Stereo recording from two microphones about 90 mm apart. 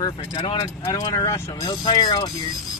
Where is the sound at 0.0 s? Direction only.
60° left (ahead or behind).